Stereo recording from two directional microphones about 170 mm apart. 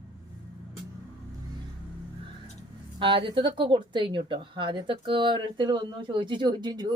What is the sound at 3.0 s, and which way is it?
Speech, 30° right (ahead or behind).